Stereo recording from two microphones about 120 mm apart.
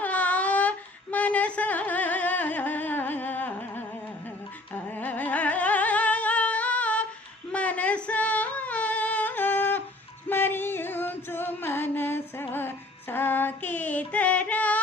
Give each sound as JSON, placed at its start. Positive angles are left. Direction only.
{"t": 0.0, "sound": "a sound", "side_deg": 10}
{"t": 4.7, "sound": "music", "side_deg": 15}
{"t": 7.5, "sound": "female singing", "side_deg": 10}
{"t": 10.2, "sound": "music", "side_deg": 15}